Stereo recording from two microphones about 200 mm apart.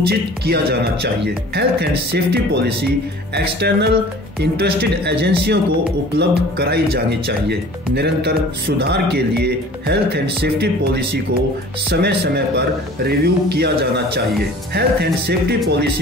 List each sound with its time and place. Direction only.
0.1 s speech: 50° right (ahead or behind)
11.9 s speech: 55° right (ahead or behind)